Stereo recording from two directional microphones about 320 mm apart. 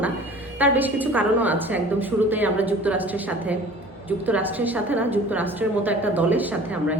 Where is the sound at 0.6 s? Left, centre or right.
Centre.